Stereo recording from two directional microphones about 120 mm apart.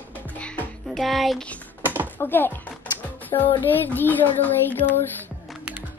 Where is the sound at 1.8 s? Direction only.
15° right (ahead or behind).